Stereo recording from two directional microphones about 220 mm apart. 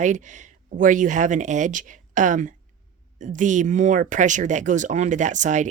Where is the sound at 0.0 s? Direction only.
35° right (ahead or behind).